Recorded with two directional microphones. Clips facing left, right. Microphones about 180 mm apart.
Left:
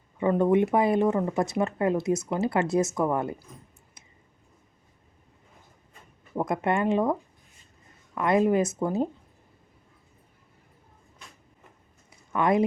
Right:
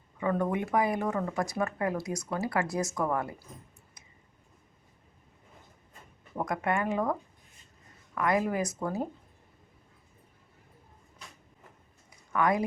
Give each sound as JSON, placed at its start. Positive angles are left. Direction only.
{"t": 0.2, "sound": "speech", "side_deg": 25}
{"t": 6.3, "sound": "speech", "side_deg": 25}
{"t": 12.3, "sound": "speech", "side_deg": 25}